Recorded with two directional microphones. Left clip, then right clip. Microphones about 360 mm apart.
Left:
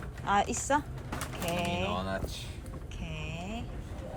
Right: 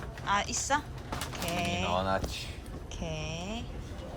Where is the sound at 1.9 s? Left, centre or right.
Centre.